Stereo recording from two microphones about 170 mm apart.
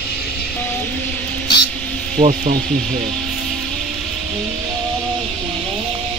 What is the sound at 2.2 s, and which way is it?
Speech, 40° right (ahead or behind).